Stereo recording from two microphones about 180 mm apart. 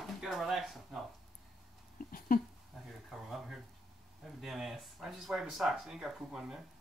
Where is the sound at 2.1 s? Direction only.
50° left (ahead or behind).